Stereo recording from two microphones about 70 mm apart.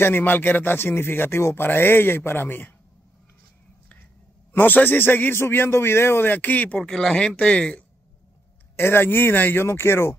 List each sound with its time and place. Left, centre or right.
0.0 s speech: left
4.5 s a man's voice: left
6.8 s speech: centre
8.7 s speech: left